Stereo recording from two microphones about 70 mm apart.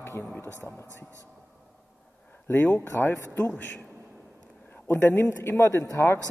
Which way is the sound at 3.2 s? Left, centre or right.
Left.